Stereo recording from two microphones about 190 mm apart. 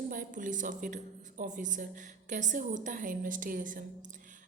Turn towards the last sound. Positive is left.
turn(degrees=-45)  # may be behind; listen again after turning